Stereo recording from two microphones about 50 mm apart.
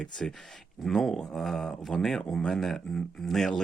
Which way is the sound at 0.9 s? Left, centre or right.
Centre.